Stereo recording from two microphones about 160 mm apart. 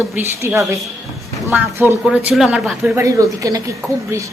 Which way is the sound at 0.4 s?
20° right (ahead or behind).